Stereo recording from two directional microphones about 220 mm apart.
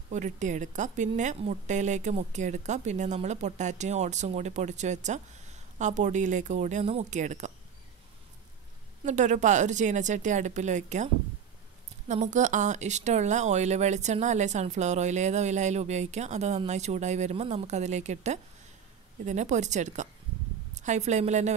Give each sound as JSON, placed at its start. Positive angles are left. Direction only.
{"t": 0.1, "sound": "a woman's voice", "side_deg": -35}
{"t": 9.0, "sound": "a woman's voice", "side_deg": -35}
{"t": 12.1, "sound": "a woman's voice", "side_deg": -35}